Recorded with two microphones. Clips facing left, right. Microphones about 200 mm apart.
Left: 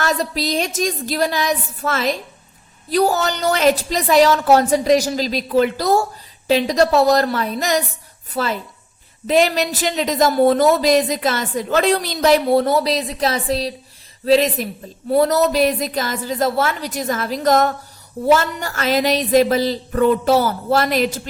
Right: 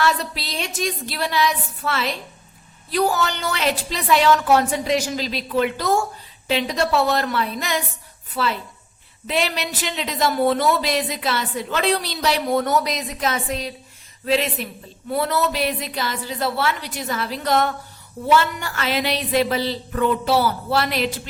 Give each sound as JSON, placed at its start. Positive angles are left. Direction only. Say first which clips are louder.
{"t": 0.0, "sound": "a woman's voice", "louder": "left 2 dB", "side_deg": 45}
{"t": 12.5, "sound": "a woman's voice", "louder": "left 5 dB", "side_deg": 30}